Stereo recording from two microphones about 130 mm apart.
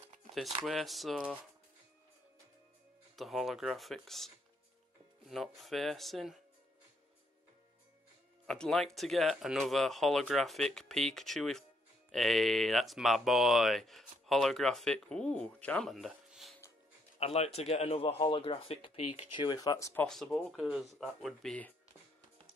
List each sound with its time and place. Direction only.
0.3 s speech: centre (ahead or behind)
3.2 s speech: centre (ahead or behind)
8.5 s speech: 5° left (ahead or behind)
17.2 s speech: 50° left (ahead or behind); by 19.9 s 30° left (ahead or behind)
20.2 s speech: 10° left (ahead or behind)
20.5 s speech: 10° right (ahead or behind)